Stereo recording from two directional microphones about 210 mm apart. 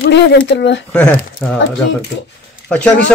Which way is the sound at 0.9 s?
5° left (ahead or behind).